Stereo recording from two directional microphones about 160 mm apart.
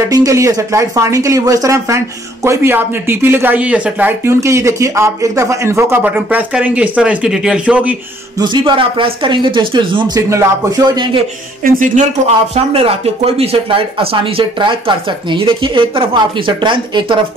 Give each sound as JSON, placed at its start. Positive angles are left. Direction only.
{"t": 0.1, "sound": "speech", "side_deg": -20}
{"t": 8.4, "sound": "speech", "side_deg": -30}
{"t": 11.6, "sound": "speech", "side_deg": -55}
{"t": 12.7, "sound": "speech", "side_deg": -40}